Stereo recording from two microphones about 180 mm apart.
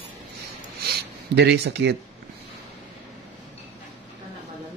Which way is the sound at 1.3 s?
65° right (ahead or behind).